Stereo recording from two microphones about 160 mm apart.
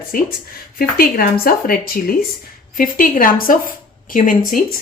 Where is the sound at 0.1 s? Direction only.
65° left (ahead or behind).